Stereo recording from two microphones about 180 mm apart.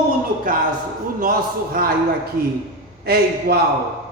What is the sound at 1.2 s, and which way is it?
Speech, 55° right (ahead or behind).